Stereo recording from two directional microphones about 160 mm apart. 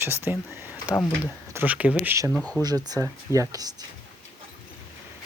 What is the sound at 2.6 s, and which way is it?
Speech, 25° right (ahead or behind).